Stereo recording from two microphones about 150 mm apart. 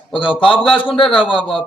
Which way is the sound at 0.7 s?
35° left (ahead or behind).